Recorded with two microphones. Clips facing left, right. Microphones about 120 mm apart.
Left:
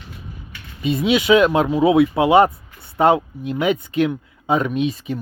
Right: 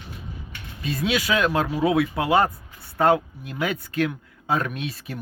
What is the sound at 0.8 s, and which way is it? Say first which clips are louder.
Speech: left 7 dB; centre (ahead or behind).